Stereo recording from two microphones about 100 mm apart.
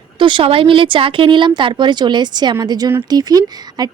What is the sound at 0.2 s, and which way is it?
Speech, 55° right (ahead or behind).